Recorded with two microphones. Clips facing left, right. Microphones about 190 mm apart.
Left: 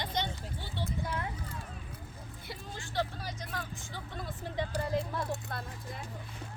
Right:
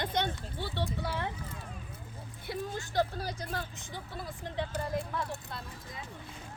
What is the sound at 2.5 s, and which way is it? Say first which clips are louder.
Speech: right 9 dB; 40° right (ahead or behind).